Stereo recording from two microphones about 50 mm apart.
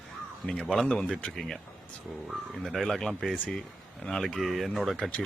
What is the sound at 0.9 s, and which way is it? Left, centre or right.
Speech, centre.